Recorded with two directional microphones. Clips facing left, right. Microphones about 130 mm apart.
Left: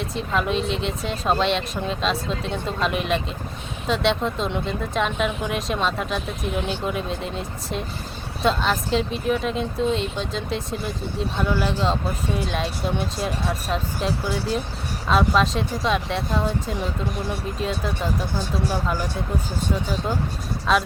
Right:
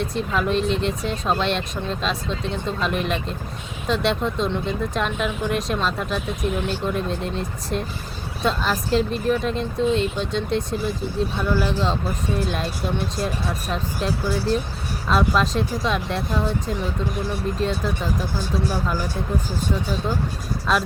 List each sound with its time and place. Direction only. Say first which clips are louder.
0.0 s speech: right 1 dB; centre (ahead or behind)
20.7 s speech: left 1 dB; centre (ahead or behind)